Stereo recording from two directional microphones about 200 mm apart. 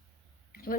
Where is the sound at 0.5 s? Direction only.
45° left (ahead or behind).